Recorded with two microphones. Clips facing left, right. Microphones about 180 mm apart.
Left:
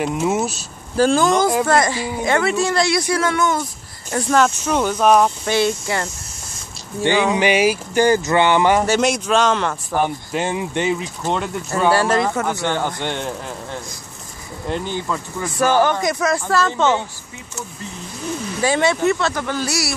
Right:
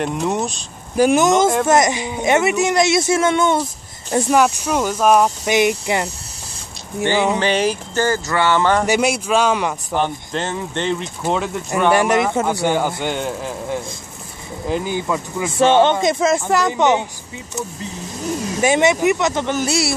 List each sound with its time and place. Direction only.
0.0 s speech: 5° left (ahead or behind)
0.9 s speech: 20° right (ahead or behind)
4.1 s speech: 15° right (ahead or behind)
7.2 s speech: 10° left (ahead or behind)
8.8 s speech: 10° right (ahead or behind)
9.9 s speech: 10° left (ahead or behind)
11.9 s speech: 20° right (ahead or behind)
15.5 s speech: 25° right (ahead or behind)
18.6 s speech: 20° right (ahead or behind)